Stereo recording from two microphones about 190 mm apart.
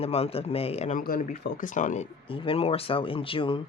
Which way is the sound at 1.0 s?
45° left (ahead or behind).